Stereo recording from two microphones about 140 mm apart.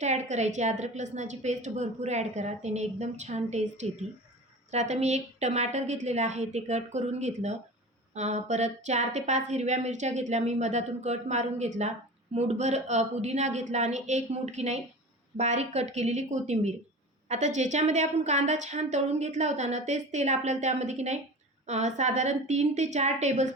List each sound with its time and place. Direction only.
0.0 s a woman's voice: 55° right (ahead or behind)